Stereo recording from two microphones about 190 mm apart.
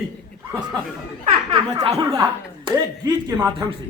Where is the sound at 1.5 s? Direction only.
30° right (ahead or behind).